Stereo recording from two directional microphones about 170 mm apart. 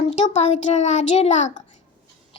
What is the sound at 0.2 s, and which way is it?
A child's voice, 40° left (ahead or behind).